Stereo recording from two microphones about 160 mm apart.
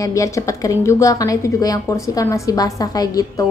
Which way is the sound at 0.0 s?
20° left (ahead or behind).